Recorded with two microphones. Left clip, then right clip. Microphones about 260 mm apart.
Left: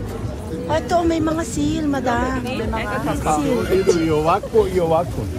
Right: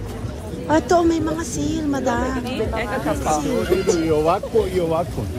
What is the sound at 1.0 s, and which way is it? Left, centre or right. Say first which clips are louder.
Speech: left 1 dB; centre.